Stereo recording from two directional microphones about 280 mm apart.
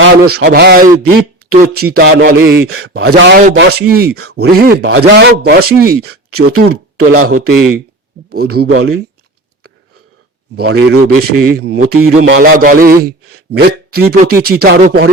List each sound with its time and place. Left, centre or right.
0.3 s a man's voice: right
2.6 s speech: right
3.1 s a man's voice: right
8.3 s a man's voice: right
10.5 s a man's voice: right